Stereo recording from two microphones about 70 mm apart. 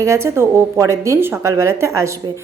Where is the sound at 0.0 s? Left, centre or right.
Right.